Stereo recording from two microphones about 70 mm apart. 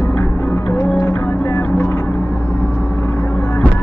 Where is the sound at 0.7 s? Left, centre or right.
Left.